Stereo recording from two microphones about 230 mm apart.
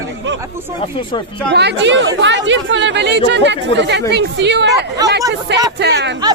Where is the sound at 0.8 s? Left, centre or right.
Left.